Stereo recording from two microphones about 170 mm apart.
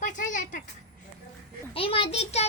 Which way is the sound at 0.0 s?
50° left (ahead or behind).